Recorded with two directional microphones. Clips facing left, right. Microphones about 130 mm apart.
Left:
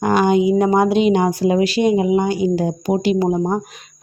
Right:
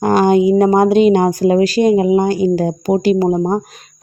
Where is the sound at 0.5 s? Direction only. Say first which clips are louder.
Right 4 dB; 45° right (ahead or behind).